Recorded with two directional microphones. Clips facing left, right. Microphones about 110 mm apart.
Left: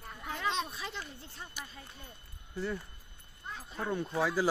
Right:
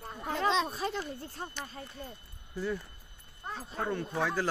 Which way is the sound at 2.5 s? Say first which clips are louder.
Right 2 dB; centre (ahead or behind).